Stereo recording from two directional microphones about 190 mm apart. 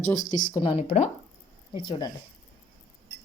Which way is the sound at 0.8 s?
35° left (ahead or behind).